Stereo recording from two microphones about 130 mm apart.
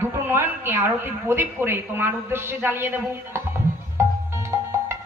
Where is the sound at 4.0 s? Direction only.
20° right (ahead or behind).